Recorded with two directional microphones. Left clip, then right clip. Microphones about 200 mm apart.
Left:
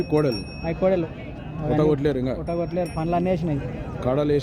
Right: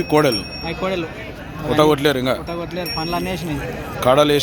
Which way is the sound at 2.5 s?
50° left (ahead or behind).